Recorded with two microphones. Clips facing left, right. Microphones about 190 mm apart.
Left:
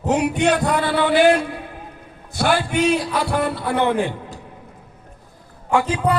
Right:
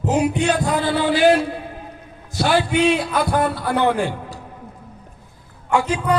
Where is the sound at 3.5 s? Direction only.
60° left (ahead or behind).